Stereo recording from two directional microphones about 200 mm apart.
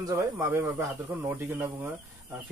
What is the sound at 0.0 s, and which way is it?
Speech, 15° right (ahead or behind).